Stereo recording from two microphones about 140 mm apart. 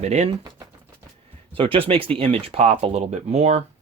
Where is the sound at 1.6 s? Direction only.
40° right (ahead or behind).